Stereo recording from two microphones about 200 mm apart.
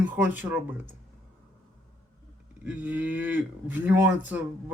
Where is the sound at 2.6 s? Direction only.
10° right (ahead or behind).